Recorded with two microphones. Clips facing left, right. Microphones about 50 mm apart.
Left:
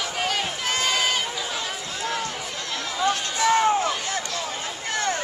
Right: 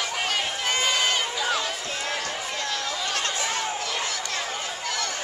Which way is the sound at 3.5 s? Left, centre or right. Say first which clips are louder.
Left 9 dB; left.